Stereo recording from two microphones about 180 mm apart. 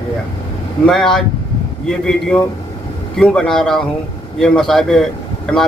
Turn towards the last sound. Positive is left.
turn(degrees=0)  # may be behind; listen again after turning